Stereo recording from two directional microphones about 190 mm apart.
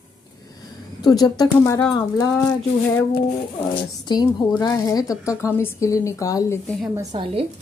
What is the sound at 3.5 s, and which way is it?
A woman's voice, 25° left (ahead or behind).